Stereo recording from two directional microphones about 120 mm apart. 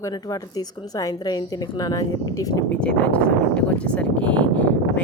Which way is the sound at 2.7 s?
10° left (ahead or behind).